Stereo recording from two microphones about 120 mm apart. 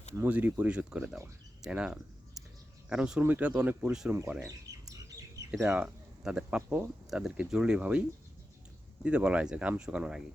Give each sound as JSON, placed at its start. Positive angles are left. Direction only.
{"t": 0.1, "sound": "speech", "side_deg": -15}
{"t": 4.4, "sound": "bird", "side_deg": -30}
{"t": 5.6, "sound": "speech", "side_deg": -5}
{"t": 9.0, "sound": "speech", "side_deg": -10}